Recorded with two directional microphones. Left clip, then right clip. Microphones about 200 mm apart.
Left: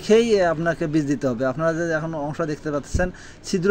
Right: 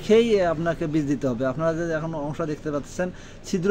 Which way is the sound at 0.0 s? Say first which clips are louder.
Left 2 dB; 20° left (ahead or behind).